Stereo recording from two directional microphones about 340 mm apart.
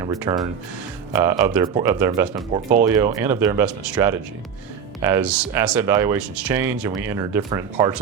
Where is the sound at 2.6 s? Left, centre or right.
Right.